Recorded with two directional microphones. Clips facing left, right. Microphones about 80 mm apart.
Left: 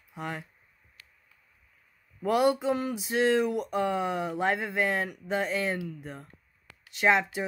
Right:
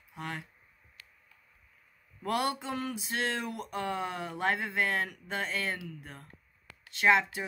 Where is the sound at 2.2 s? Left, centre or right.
Centre.